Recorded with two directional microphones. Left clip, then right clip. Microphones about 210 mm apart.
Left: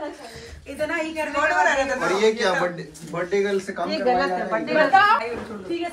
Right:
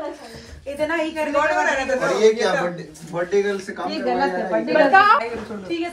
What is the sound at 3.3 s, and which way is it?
A woman's voice, 5° right (ahead or behind).